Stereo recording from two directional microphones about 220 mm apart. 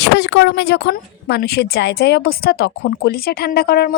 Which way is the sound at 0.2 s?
50° left (ahead or behind).